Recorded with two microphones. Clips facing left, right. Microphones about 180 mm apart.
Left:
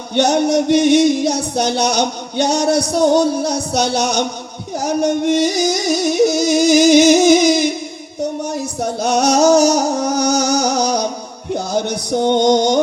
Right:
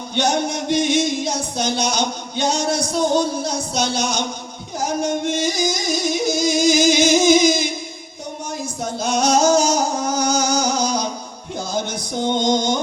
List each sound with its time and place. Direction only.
0.2 s music: 65° left (ahead or behind)
8.8 s music: 65° left (ahead or behind)